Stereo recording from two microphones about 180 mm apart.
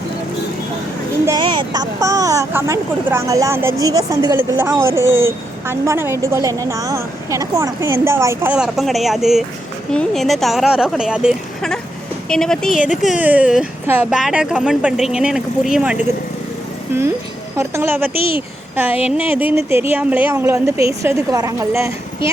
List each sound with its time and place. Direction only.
1.4 s speech: 25° right (ahead or behind); by 12.9 s centre (ahead or behind)
12.9 s speech: 40° left (ahead or behind)
13.1 s speech: 10° right (ahead or behind)